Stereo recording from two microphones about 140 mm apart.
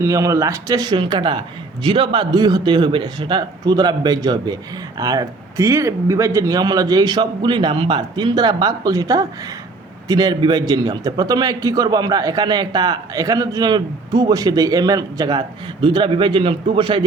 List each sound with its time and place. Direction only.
0.0 s a man's voice: 25° right (ahead or behind)